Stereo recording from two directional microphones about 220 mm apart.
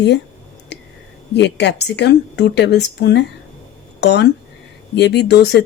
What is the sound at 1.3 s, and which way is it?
Speech, 50° left (ahead or behind).